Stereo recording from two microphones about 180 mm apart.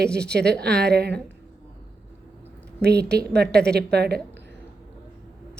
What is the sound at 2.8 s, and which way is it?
A woman's voice, 65° right (ahead or behind).